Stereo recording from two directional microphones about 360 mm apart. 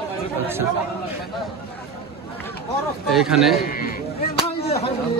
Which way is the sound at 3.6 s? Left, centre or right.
Left.